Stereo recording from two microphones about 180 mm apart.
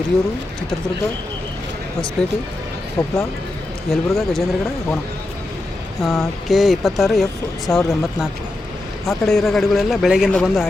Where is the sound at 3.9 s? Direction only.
Centre (ahead or behind).